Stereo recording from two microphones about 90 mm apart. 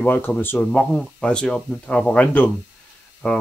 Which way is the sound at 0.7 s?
5° left (ahead or behind).